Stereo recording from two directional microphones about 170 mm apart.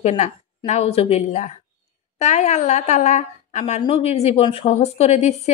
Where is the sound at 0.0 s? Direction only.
40° left (ahead or behind).